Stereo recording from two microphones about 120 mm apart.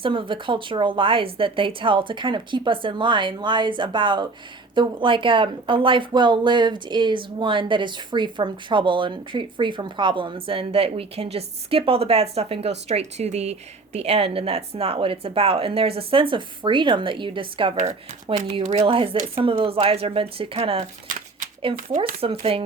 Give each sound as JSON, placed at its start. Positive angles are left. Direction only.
{"t": 0.0, "sound": "speech", "side_deg": -45}
{"t": 18.6, "sound": "speech", "side_deg": -55}
{"t": 21.8, "sound": "speech", "side_deg": -90}
{"t": 22.2, "sound": "speech", "side_deg": -50}